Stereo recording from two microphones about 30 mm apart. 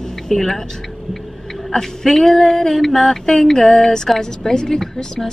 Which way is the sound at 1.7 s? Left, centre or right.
Centre.